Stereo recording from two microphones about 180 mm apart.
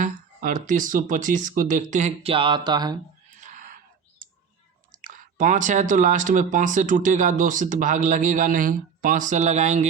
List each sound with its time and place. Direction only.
0.0 s speech: 45° right (ahead or behind); by 3.0 s 20° right (ahead or behind)
3.3 s a sound: 45° right (ahead or behind)
5.0 s speech: 45° right (ahead or behind)